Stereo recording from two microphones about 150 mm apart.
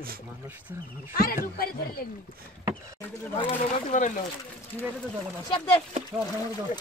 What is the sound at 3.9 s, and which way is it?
Speech, 55° left (ahead or behind).